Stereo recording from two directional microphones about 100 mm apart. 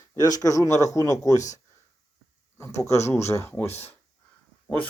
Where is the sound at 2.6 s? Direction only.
30° left (ahead or behind).